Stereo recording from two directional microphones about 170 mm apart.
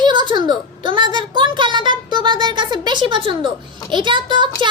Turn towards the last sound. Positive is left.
turn(degrees=-30)  # may be behind; listen again after turning